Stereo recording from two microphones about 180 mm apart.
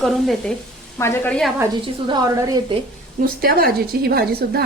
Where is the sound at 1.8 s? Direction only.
25° right (ahead or behind).